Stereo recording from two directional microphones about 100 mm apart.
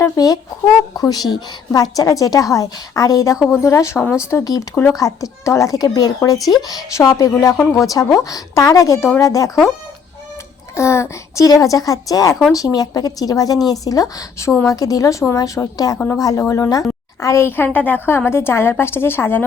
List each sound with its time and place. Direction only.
0.0 s a woman's voice: 35° left (ahead or behind)
10.8 s a woman's voice: 30° left (ahead or behind)
17.7 s a woman's voice: 15° left (ahead or behind)